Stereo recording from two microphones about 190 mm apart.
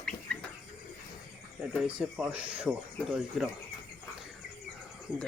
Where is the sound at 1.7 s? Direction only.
5° right (ahead or behind).